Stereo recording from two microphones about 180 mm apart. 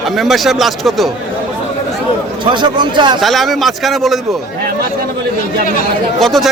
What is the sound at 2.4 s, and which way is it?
Speech, 25° right (ahead or behind).